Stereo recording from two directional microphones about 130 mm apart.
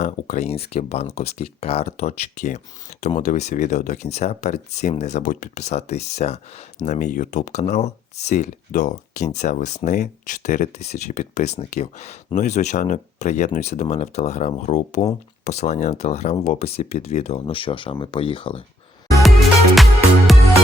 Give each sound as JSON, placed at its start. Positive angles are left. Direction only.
{"t": 0.0, "sound": "speech", "side_deg": 60}
{"t": 6.8, "sound": "speech", "side_deg": 75}
{"t": 17.4, "sound": "speech", "side_deg": 40}
{"t": 19.7, "sound": "music", "side_deg": 0}